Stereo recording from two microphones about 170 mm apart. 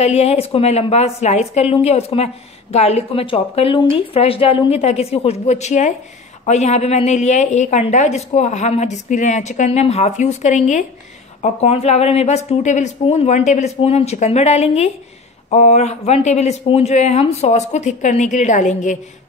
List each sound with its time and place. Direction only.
0.0 s a woman's voice: 40° left (ahead or behind)